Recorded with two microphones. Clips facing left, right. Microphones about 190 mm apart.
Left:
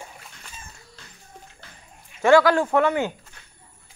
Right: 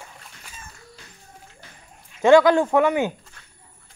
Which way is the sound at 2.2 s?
20° right (ahead or behind).